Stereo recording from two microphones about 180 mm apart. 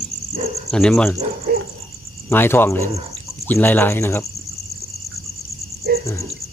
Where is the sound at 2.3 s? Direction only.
10° left (ahead or behind).